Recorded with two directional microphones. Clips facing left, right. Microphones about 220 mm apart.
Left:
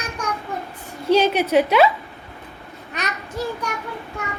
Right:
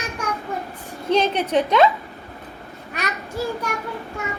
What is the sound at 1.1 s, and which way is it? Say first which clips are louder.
Speech: left 3 dB; 10° left (ahead or behind).